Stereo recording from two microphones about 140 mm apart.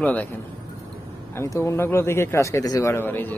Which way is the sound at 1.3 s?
20° left (ahead or behind).